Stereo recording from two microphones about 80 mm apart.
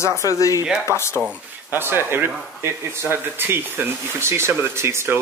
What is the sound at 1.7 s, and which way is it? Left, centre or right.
Speech, right.